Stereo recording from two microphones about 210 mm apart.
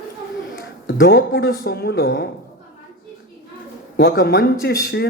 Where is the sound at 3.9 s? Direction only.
55° left (ahead or behind).